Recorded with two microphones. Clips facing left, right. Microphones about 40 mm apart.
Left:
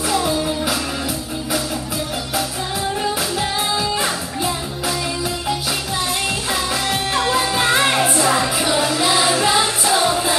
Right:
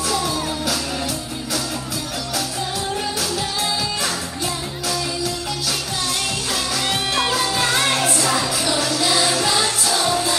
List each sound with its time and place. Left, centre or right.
0.2 s music: left
7.3 s music: left